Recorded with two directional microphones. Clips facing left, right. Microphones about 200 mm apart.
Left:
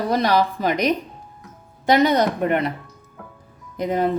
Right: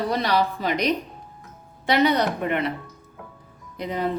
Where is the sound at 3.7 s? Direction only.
50° left (ahead or behind).